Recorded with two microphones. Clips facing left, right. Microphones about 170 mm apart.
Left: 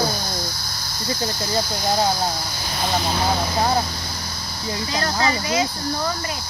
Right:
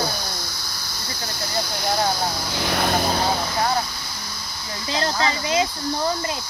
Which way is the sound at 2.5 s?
75° right (ahead or behind).